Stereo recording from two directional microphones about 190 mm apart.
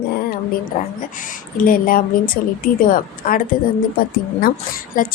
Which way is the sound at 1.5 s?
45° left (ahead or behind).